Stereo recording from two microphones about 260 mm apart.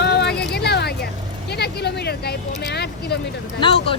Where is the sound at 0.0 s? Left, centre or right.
Left.